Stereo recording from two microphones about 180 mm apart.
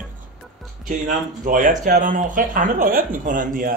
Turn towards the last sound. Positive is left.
turn(degrees=-50)  # may be behind; listen again after turning